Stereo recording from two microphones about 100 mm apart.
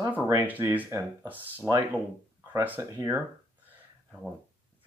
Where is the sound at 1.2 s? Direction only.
15° right (ahead or behind).